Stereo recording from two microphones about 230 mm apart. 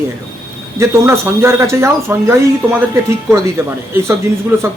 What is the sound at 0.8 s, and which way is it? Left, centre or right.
Speech, centre.